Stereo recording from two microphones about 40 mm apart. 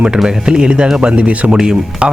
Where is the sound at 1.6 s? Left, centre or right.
Centre.